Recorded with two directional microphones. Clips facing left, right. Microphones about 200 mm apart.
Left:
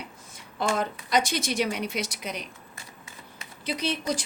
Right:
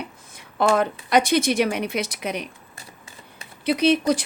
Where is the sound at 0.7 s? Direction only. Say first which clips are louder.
Right 6 dB; 60° right (ahead or behind).